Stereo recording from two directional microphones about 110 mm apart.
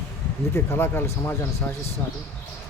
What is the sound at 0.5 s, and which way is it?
Speech, 20° left (ahead or behind).